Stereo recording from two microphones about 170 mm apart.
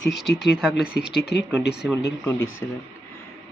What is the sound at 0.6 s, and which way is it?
Speech, 5° right (ahead or behind).